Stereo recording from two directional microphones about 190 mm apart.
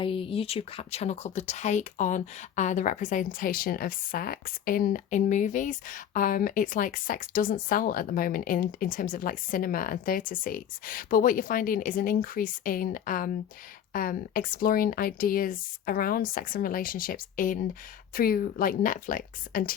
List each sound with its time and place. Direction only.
0.0 s speech: 30° left (ahead or behind); by 19.7 s 45° left (ahead or behind)